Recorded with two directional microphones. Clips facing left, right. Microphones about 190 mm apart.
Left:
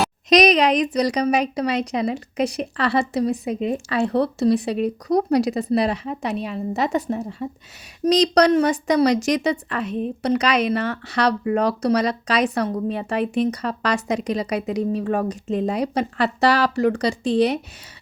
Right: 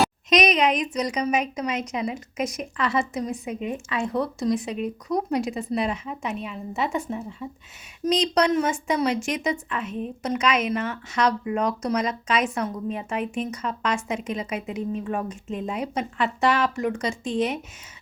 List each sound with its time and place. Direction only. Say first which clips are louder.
0.3 s a woman's voice: left 7 dB; 35° left (ahead or behind)
8.0 s a woman's voice: left 5 dB; 40° left (ahead or behind)
14.8 s speech: left 5 dB; 80° left
15.1 s a woman's voice: left 7 dB; 35° left (ahead or behind)